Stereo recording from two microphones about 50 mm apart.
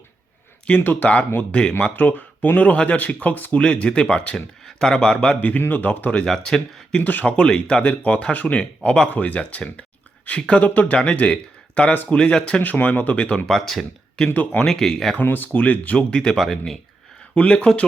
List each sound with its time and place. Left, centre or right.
0.8 s speech: left
1.4 s speech: left
2.0 s speech: left
3.6 s speech: left
4.4 s speech: centre
4.9 s speech: centre
6.2 s speech: centre
7.0 s speech: left; by 12.6 s centre
12.6 s speech: left
13.5 s speech: centre
14.2 s speech: centre
15.2 s speech: left; by 16.8 s centre
17.3 s speech: left